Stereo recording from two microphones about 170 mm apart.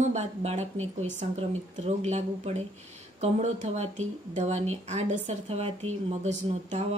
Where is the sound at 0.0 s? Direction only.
40° right (ahead or behind).